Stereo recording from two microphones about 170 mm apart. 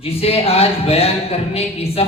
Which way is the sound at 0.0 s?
35° left (ahead or behind).